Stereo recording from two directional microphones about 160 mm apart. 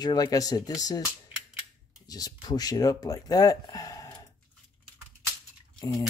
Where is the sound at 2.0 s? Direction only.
25° left (ahead or behind).